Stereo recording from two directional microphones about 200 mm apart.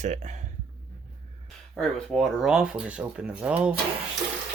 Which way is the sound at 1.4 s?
5° left (ahead or behind).